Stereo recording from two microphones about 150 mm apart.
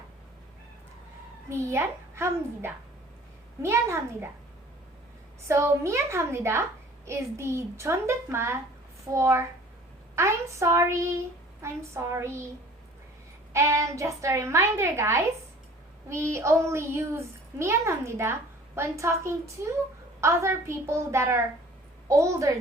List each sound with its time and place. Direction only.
1.5 s a child's voice: 20° right (ahead or behind)
5.5 s a child's voice: 20° right (ahead or behind)
13.5 s a woman's voice: 20° right (ahead or behind)